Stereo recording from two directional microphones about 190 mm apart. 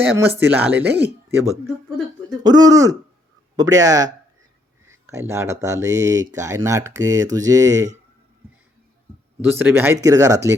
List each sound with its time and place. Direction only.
0.0 s speech: 10° right (ahead or behind)
2.4 s speech: 20° right (ahead or behind)
9.4 s speech: 10° right (ahead or behind)